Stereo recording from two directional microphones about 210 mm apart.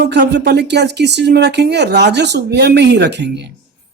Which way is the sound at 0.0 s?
55° right (ahead or behind).